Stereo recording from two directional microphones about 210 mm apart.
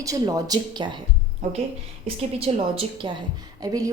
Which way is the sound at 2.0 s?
25° right (ahead or behind).